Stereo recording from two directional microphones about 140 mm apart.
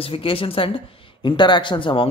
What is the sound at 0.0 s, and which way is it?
Speech, 40° left (ahead or behind).